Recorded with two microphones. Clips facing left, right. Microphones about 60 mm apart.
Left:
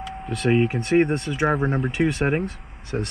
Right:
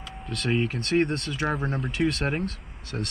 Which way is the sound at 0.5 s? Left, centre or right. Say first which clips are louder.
Left 6 dB; centre.